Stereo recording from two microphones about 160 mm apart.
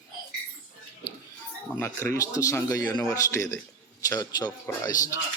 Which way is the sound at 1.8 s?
15° left (ahead or behind).